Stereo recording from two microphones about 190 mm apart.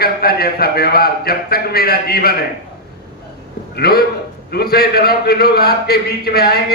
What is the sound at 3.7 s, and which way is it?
A man's voice, 55° left (ahead or behind).